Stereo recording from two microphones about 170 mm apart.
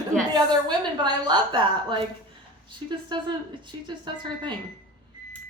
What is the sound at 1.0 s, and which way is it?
A woman's voice, 25° right (ahead or behind).